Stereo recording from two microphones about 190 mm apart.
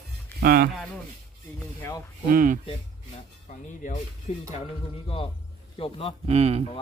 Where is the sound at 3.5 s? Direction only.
40° left (ahead or behind).